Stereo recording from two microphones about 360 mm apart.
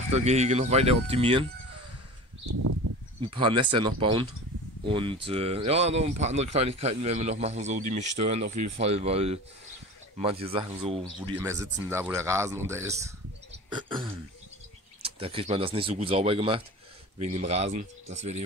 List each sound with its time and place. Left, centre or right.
0.1 s speech: centre
2.4 s a sound: right
3.2 s speech: centre